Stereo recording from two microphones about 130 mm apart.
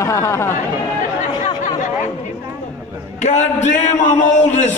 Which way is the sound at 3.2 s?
65° left (ahead or behind).